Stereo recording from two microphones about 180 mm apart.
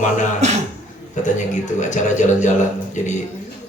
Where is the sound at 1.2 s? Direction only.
45° left (ahead or behind).